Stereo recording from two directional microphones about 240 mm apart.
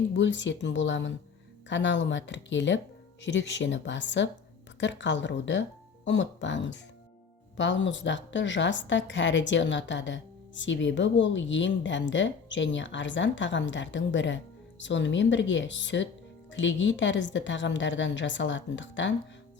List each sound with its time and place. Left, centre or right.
0.1 s a woman's voice: left